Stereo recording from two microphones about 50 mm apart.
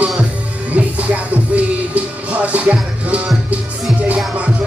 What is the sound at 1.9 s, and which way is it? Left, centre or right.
Music, right.